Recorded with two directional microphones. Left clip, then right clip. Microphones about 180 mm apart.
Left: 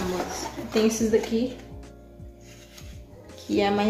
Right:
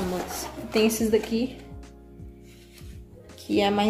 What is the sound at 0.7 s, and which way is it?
Speech, 45° right (ahead or behind).